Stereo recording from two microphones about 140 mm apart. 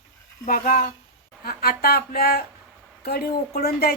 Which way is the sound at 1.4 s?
90° left.